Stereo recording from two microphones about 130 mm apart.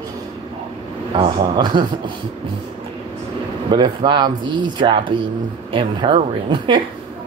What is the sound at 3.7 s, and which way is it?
Speech, 35° right (ahead or behind).